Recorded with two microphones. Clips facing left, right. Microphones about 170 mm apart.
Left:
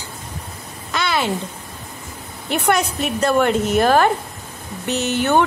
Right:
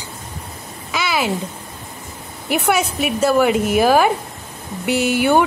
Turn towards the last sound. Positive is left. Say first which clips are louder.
# right 2 dB
turn(degrees=-10)  # may be behind; listen again after turning